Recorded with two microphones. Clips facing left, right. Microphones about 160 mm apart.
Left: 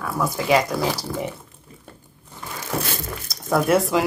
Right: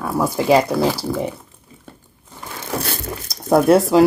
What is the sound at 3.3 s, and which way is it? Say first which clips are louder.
Speech: right 6 dB; 35° right (ahead or behind).